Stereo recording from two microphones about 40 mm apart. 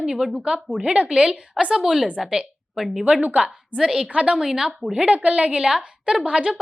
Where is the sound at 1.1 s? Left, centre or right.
Centre.